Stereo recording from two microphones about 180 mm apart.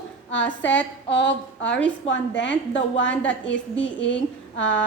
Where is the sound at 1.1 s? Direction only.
85° left.